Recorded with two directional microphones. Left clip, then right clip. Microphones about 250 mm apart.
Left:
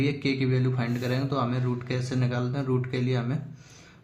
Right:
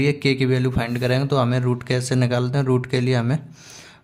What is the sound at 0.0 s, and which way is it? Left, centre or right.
Speech, right.